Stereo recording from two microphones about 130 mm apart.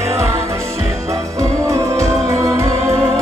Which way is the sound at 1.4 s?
25° right (ahead or behind).